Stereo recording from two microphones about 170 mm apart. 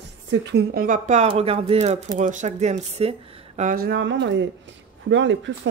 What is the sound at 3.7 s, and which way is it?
Speech, 70° right (ahead or behind).